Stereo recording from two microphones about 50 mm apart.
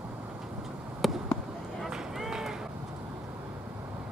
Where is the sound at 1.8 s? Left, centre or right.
Centre.